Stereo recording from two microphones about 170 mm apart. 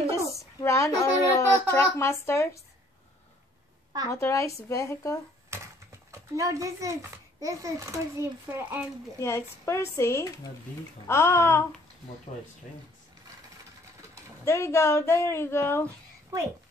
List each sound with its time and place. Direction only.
0.1 s a woman's voice: 15° left (ahead or behind)
4.1 s speech: 15° left (ahead or behind)
5.5 s a child's voice: 15° right (ahead or behind)
9.2 s speech: 15° left (ahead or behind)
14.4 s speech: 15° left (ahead or behind)